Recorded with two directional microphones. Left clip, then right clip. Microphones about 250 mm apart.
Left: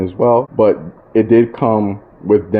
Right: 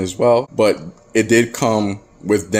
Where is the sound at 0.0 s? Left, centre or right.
Centre.